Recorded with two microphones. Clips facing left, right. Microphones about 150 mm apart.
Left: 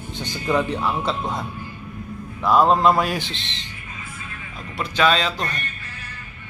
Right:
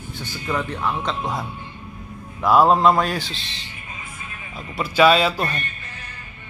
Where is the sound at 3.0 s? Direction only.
15° left (ahead or behind).